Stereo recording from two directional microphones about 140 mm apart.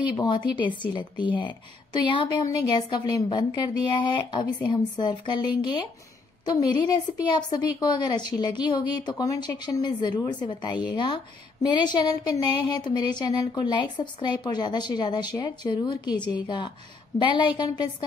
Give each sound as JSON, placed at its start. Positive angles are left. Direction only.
{"t": 0.1, "sound": "a woman's voice", "side_deg": 35}